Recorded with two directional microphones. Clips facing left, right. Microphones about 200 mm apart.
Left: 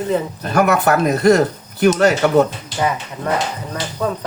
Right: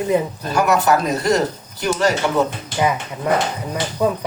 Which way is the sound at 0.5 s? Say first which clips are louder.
Left 2 dB; 55° left (ahead or behind).